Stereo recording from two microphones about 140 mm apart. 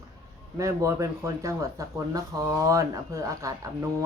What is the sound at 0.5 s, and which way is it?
Speech, 20° right (ahead or behind).